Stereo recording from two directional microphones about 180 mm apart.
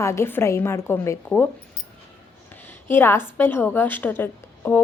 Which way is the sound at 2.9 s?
15° left (ahead or behind).